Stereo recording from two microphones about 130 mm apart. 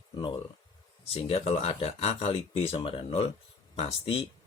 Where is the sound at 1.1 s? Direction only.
50° left (ahead or behind).